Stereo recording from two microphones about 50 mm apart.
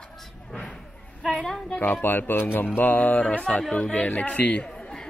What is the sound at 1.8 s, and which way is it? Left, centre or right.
Speech, left.